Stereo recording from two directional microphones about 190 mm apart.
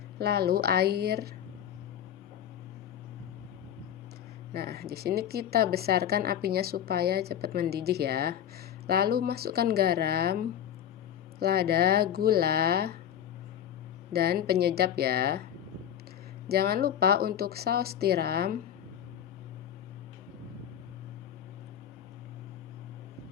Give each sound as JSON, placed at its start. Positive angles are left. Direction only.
{"t": 0.2, "sound": "a woman's voice", "side_deg": -55}
{"t": 4.5, "sound": "a woman's voice", "side_deg": -55}
{"t": 14.1, "sound": "a woman's voice", "side_deg": -55}
{"t": 16.5, "sound": "a woman's voice", "side_deg": -55}